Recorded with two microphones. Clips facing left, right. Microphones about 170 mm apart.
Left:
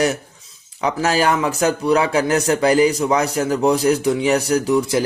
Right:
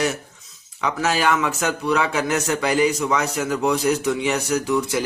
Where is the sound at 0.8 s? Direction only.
35° left (ahead or behind).